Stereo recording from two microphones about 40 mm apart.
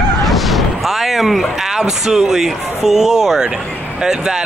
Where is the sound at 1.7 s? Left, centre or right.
Centre.